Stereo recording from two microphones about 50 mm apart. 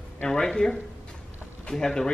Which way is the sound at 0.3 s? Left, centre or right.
Centre.